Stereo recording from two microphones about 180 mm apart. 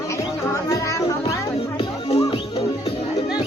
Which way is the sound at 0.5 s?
15° left (ahead or behind).